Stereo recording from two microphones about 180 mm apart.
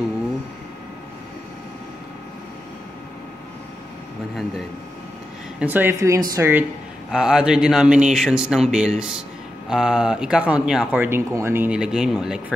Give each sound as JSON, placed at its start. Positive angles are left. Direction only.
{"t": 5.6, "sound": "speech", "side_deg": -10}